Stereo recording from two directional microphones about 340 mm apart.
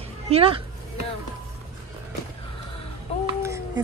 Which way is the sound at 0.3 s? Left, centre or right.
Centre.